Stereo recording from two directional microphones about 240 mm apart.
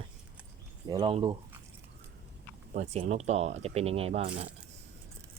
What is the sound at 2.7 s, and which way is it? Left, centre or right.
Speech, right.